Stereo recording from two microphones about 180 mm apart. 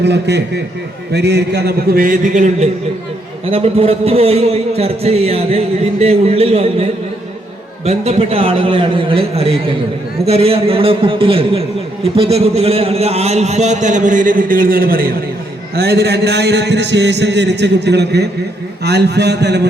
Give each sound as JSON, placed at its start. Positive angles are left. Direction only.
{"t": 0.0, "sound": "a man's voice", "side_deg": -70}
{"t": 3.5, "sound": "a man's voice", "side_deg": -30}
{"t": 7.9, "sound": "a man's voice", "side_deg": -35}
{"t": 15.7, "sound": "a man's voice", "side_deg": -65}